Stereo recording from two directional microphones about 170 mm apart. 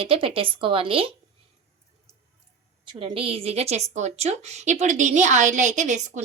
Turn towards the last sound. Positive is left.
turn(degrees=-45)  # may be behind; listen again after turning